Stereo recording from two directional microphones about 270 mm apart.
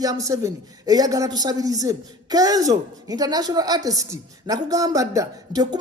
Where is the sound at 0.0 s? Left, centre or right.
Centre.